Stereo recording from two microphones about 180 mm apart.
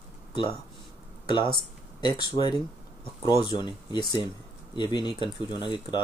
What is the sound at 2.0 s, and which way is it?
Speech, 25° left (ahead or behind).